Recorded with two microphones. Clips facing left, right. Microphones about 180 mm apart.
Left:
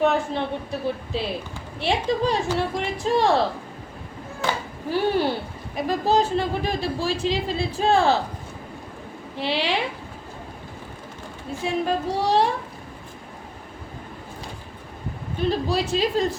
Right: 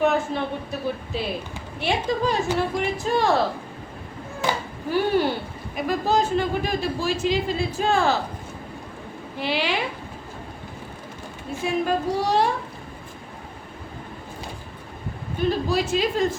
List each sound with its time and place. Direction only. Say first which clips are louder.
0.0 s a woman's voice: even; 30° left (ahead or behind)
5.7 s a woman's voice: left 1 dB; 35° left (ahead or behind)
9.4 s a woman's voice: left 1 dB; 30° left (ahead or behind)
11.6 s a woman's voice: right 1 dB; 30° left (ahead or behind)
15.4 s a woman's voice: right 1 dB; 35° left (ahead or behind)